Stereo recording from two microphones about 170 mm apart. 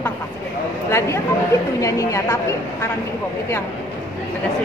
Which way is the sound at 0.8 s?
15° left (ahead or behind).